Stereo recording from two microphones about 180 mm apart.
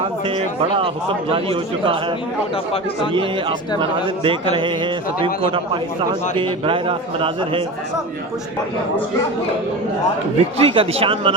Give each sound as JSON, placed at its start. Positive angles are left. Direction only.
{"t": 0.3, "sound": "a man's voice", "side_deg": -30}
{"t": 3.8, "sound": "a man's voice", "side_deg": -30}
{"t": 10.3, "sound": "speech", "side_deg": -30}